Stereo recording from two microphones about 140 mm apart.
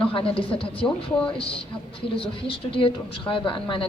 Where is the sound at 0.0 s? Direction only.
40° left (ahead or behind).